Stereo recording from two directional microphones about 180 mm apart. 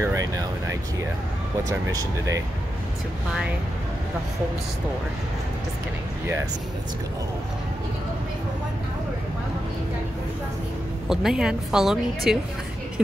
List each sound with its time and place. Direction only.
0.0 s a sound: 20° right (ahead or behind)
1.7 s speech: 20° right (ahead or behind)
11.1 s a woman's voice: 5° right (ahead or behind)